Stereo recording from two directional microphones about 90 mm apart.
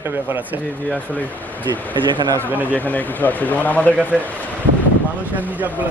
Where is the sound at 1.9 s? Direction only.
60° right (ahead or behind).